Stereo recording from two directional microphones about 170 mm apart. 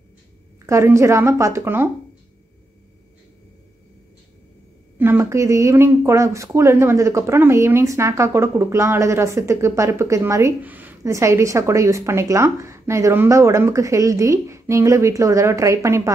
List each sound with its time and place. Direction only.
0.7 s speech: 15° right (ahead or behind)
4.9 s speech: 10° right (ahead or behind)